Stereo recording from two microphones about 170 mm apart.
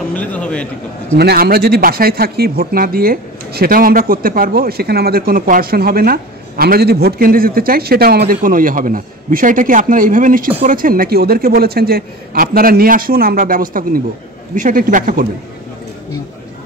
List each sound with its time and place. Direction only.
0.2 s speech: 10° left (ahead or behind)
1.1 s speech: 70° right (ahead or behind); by 15.2 s 55° right (ahead or behind)